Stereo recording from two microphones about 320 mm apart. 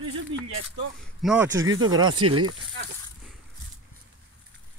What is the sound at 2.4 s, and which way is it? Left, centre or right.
Speech, right.